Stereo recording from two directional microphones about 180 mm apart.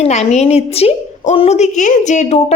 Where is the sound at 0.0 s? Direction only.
40° left (ahead or behind).